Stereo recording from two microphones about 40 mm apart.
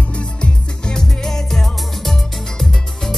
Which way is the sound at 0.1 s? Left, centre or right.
Left.